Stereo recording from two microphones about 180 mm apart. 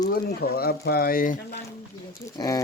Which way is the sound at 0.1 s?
60° left (ahead or behind).